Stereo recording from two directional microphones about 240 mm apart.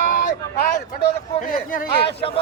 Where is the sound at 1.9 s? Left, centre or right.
Left.